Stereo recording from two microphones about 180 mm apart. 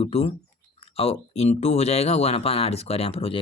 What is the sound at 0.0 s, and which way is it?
Speech, 35° left (ahead or behind).